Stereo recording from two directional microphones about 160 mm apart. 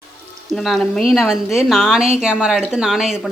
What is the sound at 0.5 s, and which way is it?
Speech, centre (ahead or behind).